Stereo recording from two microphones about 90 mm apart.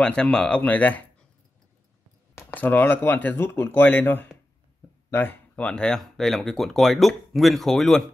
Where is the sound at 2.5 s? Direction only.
20° left (ahead or behind).